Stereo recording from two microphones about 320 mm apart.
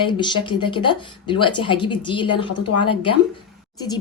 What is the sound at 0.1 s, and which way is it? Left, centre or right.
A woman's voice, centre.